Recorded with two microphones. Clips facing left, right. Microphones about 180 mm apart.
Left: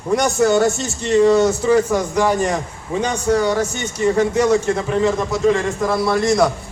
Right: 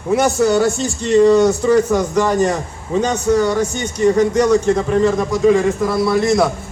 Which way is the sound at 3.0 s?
10° left (ahead or behind).